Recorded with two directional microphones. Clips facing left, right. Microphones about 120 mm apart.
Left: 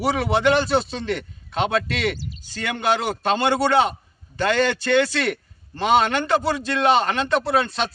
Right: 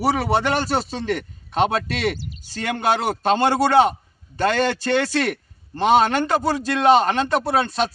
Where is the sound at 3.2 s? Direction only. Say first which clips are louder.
Right 2 dB; 40° right (ahead or behind).